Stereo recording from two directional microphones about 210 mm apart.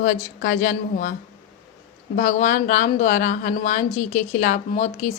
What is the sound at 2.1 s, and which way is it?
Speech, 35° left (ahead or behind).